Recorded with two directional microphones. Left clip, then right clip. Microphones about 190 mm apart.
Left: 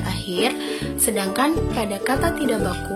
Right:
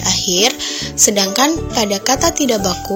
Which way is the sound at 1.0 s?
30° right (ahead or behind).